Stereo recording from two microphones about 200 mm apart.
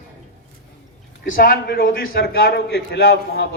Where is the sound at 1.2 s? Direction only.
45° left (ahead or behind).